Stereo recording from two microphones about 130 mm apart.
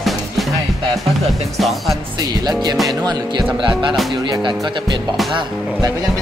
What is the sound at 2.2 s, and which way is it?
Music, 30° right (ahead or behind).